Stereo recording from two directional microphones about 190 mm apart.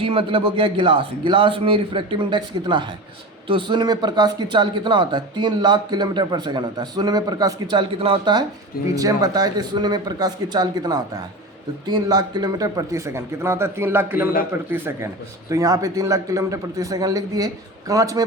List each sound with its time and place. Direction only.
0.0 s a man's voice: 30° right (ahead or behind)